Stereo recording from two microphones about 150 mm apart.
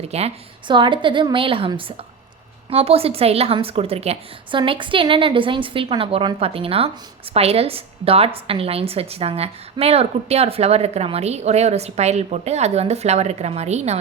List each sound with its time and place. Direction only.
0.0 s a woman's voice: 45° right (ahead or behind)